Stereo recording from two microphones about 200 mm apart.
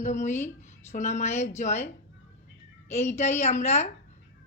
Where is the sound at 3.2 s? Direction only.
35° left (ahead or behind).